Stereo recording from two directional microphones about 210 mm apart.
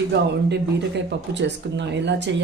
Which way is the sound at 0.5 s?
55° right (ahead or behind).